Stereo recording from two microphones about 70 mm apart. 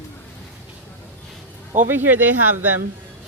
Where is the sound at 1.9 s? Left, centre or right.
Right.